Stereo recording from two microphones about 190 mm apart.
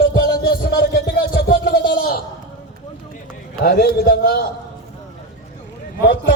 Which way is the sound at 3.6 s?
55° left (ahead or behind).